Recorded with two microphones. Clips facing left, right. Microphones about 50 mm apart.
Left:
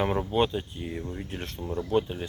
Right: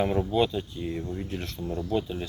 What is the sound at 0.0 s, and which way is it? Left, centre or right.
Speech, left.